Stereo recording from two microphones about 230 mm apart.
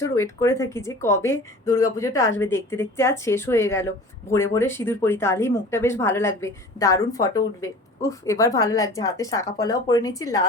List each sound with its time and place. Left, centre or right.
0.0 s a woman's voice: centre